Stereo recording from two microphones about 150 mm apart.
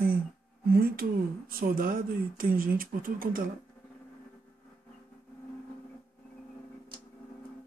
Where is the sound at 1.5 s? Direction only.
70° right (ahead or behind).